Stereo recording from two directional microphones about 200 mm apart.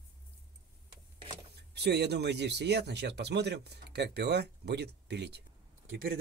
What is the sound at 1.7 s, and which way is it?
Speech, 55° right (ahead or behind).